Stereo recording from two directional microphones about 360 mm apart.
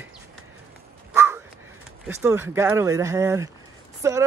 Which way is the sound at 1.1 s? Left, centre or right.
Centre.